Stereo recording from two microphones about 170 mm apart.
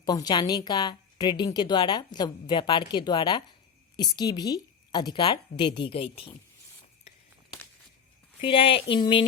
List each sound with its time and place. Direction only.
0.0 s a woman's voice: 25° left (ahead or behind)
8.4 s speech: 35° left (ahead or behind)